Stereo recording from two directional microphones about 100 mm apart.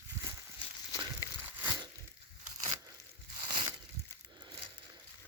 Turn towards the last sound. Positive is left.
turn(degrees=-45)  # may be behind; listen again after turning